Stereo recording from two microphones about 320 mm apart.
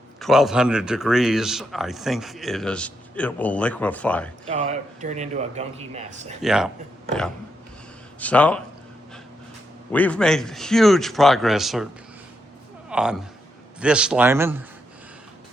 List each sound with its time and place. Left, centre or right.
0.2 s speech: centre
4.4 s speech: right
6.4 s speech: centre
8.2 s speech: centre
9.9 s speech: centre
12.9 s speech: centre